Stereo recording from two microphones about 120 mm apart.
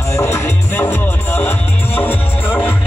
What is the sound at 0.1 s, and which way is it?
Music, 20° left (ahead or behind).